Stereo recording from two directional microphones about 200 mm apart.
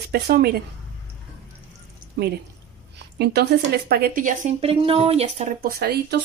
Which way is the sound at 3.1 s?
55° right (ahead or behind).